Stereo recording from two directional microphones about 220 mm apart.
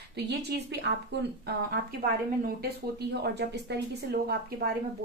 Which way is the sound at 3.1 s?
50° right (ahead or behind).